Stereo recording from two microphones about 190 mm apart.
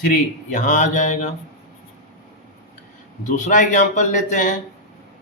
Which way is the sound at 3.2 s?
40° left (ahead or behind).